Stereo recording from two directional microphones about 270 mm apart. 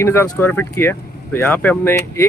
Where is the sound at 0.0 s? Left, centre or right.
Centre.